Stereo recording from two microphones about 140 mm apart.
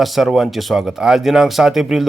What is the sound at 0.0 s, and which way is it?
Speech, centre (ahead or behind).